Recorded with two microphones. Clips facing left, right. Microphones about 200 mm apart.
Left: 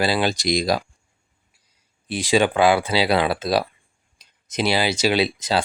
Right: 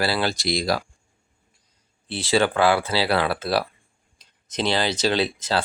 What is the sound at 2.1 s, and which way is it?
Speech, 15° left (ahead or behind).